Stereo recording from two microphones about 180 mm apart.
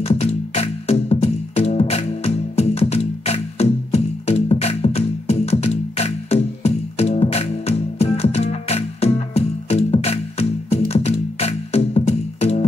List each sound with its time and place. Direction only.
0.0 s music: 35° left (ahead or behind)